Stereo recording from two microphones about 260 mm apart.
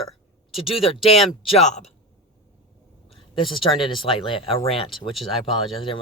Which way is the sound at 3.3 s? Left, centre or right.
Centre.